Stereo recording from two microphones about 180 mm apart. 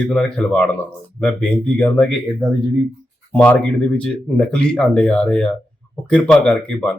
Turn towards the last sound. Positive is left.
turn(degrees=5)  # may be behind; listen again after turning